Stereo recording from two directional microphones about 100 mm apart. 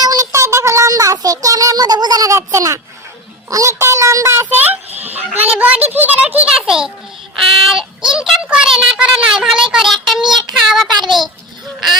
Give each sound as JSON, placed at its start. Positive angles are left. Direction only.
{"t": 0.0, "sound": "a sound", "side_deg": -40}
{"t": 3.5, "sound": "a child's voice", "side_deg": -30}
{"t": 4.9, "sound": "honk", "side_deg": -90}
{"t": 5.1, "sound": "a child's voice", "side_deg": -15}
{"t": 10.2, "sound": "child singing", "side_deg": -50}
{"t": 10.7, "sound": "a child's voice", "side_deg": 0}